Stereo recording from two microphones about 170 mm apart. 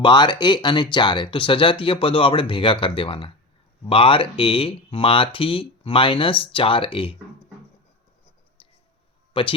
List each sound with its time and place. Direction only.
0.0 s speech: 25° left (ahead or behind)
9.3 s speech: 30° left (ahead or behind)